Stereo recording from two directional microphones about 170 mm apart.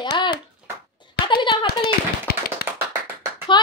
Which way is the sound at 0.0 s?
25° left (ahead or behind).